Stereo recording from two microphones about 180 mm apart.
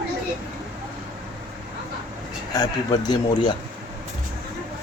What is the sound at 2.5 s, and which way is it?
Speech, 20° left (ahead or behind).